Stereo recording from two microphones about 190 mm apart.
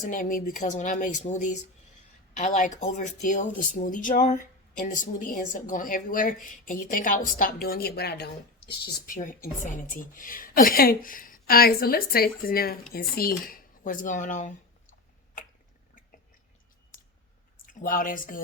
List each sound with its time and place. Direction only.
0.0 s a woman's voice: 45° left (ahead or behind)
15.4 s a sound: 45° left (ahead or behind)
17.7 s a woman's voice: 45° left (ahead or behind)